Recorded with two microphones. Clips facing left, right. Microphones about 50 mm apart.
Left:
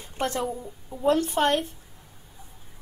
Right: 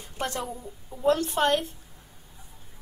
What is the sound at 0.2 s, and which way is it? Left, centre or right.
A woman's voice, centre.